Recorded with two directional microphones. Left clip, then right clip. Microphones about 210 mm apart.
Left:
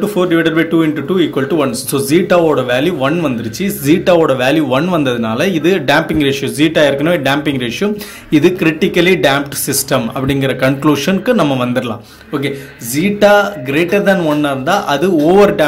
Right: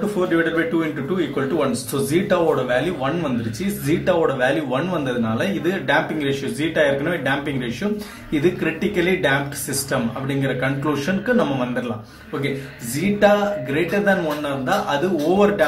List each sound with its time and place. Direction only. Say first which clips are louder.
0.3 s a man's voice: left 6 dB; 40° left (ahead or behind)
13.2 s speech: left 7 dB; 45° left (ahead or behind)